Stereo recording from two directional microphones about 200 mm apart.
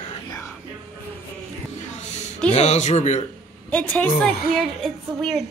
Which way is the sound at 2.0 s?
35° left (ahead or behind).